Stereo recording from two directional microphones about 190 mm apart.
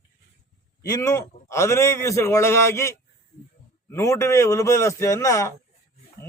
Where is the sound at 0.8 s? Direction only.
15° left (ahead or behind).